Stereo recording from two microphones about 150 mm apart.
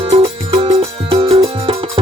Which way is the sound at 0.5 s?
40° right (ahead or behind).